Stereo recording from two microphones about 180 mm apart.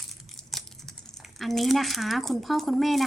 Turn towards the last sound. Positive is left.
turn(degrees=0)  # may be behind; listen again after turning